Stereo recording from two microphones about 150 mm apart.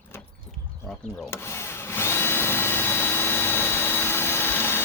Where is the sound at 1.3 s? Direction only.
15° left (ahead or behind).